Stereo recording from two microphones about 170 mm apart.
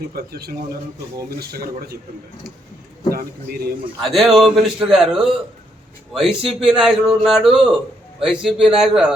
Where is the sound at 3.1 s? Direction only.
60° right (ahead or behind).